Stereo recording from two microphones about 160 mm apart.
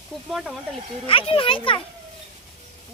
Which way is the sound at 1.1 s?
35° left (ahead or behind).